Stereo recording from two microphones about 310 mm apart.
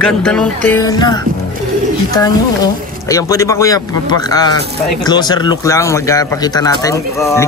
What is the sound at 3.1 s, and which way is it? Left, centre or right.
Speech, centre.